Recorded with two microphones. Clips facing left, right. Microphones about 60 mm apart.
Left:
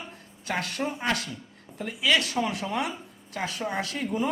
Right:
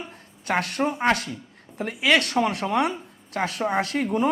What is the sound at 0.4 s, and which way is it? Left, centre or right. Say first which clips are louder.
A man's voice: right 6 dB; right.